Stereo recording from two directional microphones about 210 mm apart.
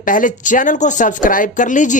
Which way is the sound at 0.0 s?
40° left (ahead or behind).